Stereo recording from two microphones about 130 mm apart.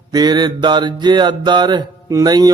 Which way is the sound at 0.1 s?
35° right (ahead or behind).